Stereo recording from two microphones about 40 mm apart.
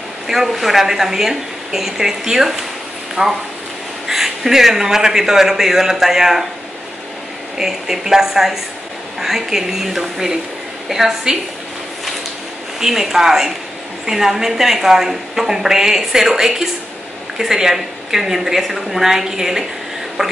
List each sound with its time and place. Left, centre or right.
0.3 s a woman's voice: centre
3.2 s speech: right
4.1 s a woman's voice: centre
7.5 s a woman's voice: centre
12.8 s a woman's voice: centre